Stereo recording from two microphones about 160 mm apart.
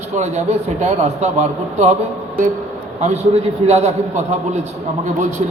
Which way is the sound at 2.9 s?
45° right (ahead or behind).